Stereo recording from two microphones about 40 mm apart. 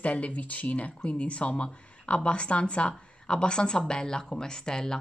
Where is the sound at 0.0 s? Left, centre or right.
Left.